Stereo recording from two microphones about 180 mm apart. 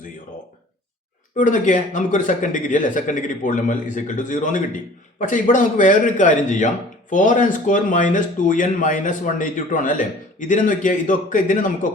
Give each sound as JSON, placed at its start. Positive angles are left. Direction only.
{"t": 1.4, "sound": "a man's voice", "side_deg": 45}